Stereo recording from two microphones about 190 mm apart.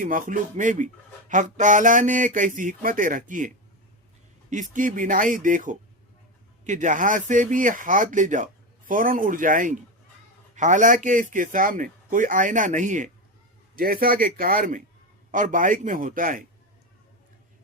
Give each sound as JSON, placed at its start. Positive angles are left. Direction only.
{"t": 0.0, "sound": "a man's voice", "side_deg": -45}